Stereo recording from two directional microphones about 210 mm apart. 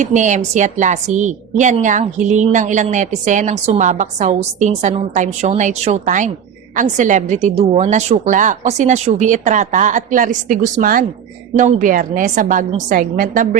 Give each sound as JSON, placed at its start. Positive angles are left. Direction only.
{"t": 0.0, "sound": "a woman's voice", "side_deg": -35}